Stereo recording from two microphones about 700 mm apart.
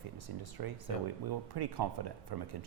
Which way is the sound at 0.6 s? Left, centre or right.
Right.